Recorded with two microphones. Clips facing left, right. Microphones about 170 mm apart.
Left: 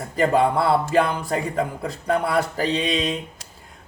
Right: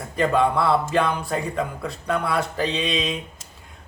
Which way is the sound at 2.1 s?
35° left (ahead or behind).